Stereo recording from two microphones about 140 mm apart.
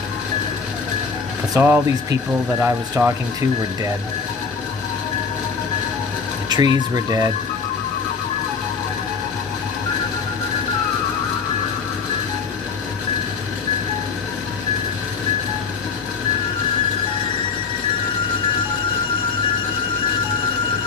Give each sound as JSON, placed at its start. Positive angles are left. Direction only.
{"t": 1.5, "sound": "speech", "side_deg": -15}
{"t": 6.5, "sound": "speech", "side_deg": -30}